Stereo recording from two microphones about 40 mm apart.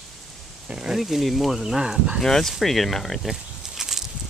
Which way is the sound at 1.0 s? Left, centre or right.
Centre.